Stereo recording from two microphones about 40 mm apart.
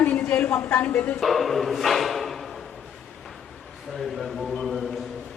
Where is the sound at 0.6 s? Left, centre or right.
Left.